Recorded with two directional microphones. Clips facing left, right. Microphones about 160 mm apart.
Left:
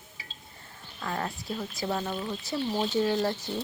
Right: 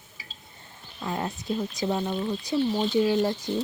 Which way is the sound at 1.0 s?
20° right (ahead or behind).